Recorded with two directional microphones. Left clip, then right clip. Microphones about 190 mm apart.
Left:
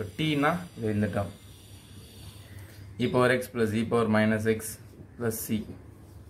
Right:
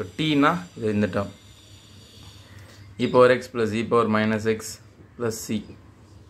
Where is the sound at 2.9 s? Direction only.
25° right (ahead or behind).